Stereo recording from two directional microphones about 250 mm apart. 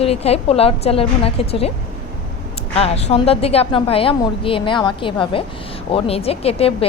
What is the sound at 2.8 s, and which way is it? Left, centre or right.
Speech, left.